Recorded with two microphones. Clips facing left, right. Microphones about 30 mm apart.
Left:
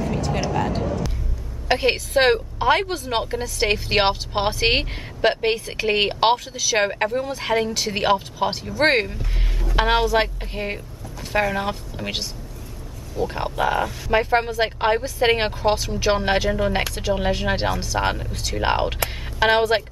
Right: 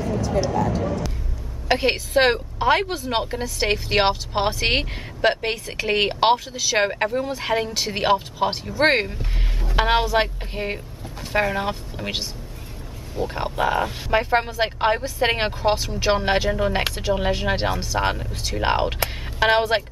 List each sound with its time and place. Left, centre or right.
0.2 s speech: left
1.7 s speech: centre
13.3 s speech: centre